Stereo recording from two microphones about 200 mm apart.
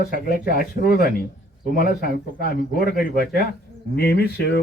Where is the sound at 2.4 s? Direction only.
50° left (ahead or behind).